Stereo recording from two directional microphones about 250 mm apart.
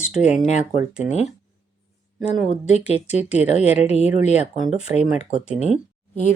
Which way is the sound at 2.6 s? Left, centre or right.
Left.